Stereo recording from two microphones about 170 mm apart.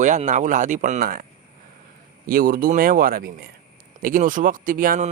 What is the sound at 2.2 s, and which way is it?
Speech, 55° right (ahead or behind).